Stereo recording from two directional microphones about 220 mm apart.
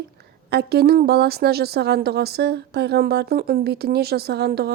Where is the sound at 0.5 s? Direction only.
45° right (ahead or behind).